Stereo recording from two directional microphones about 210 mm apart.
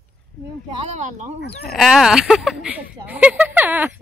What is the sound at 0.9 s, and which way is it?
Speech, 35° right (ahead or behind).